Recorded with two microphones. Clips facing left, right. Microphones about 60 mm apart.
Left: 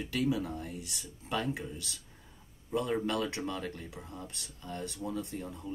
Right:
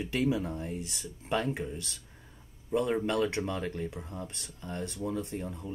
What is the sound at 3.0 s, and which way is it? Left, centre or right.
Speech, right.